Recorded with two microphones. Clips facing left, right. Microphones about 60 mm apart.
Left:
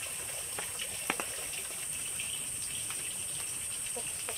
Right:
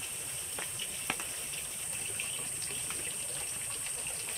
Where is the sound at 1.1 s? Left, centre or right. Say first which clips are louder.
Left 3 dB; centre.